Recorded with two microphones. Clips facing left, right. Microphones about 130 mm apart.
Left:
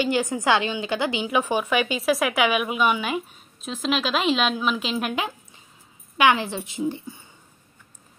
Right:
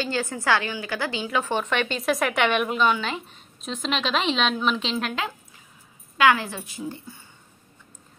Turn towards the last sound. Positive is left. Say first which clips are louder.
# left 6 dB
turn(degrees=20)  # may be behind; listen again after turning